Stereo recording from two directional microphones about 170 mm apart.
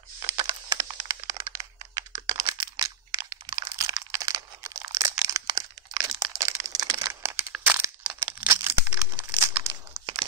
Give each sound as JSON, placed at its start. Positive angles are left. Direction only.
{"t": 0.4, "sound": "a sound", "side_deg": -20}
{"t": 9.3, "sound": "crumpling", "side_deg": -15}
{"t": 9.9, "sound": "crumpling", "side_deg": -25}